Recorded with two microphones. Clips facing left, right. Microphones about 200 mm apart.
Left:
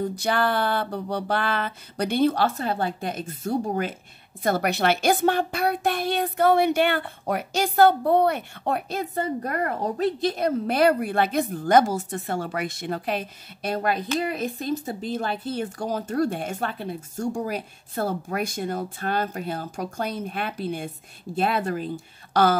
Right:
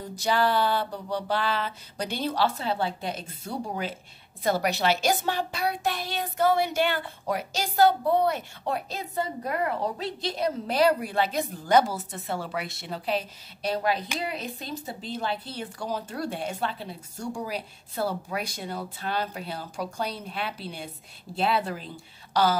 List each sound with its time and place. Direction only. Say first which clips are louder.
0.2 s a child's voice: right 2 dB; 55° left (ahead or behind)